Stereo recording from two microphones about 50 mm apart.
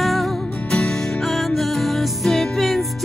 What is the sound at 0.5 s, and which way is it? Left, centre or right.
Music, centre.